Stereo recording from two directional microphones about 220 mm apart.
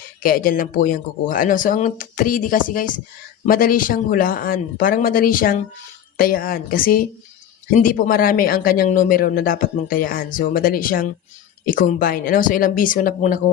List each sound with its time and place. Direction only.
0.2 s speech: 40° left (ahead or behind)